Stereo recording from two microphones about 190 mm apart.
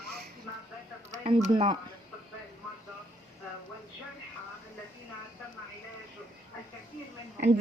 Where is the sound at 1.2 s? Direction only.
25° right (ahead or behind).